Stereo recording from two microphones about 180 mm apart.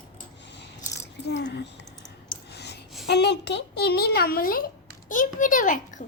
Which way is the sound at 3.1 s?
70° left (ahead or behind).